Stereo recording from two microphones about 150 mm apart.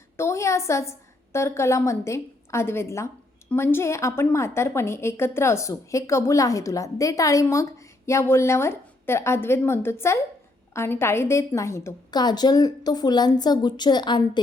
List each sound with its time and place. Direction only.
0.2 s a woman's voice: 20° left (ahead or behind)